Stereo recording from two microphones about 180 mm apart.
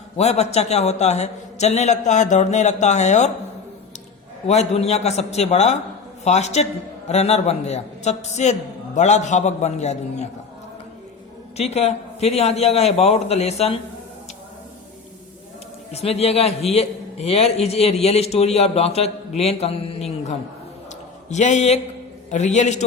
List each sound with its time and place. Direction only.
0.2 s a man's voice: 35° left (ahead or behind)
4.4 s a man's voice: 35° left (ahead or behind)
11.5 s a man's voice: 35° left (ahead or behind)
15.9 s a man's voice: 35° left (ahead or behind)